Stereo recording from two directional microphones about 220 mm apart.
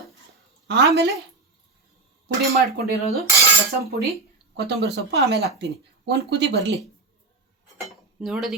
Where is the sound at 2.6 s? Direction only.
45° right (ahead or behind).